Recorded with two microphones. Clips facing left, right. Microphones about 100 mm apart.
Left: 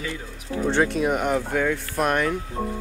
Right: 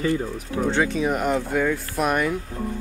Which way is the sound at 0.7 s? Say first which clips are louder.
Left 2 dB; centre (ahead or behind).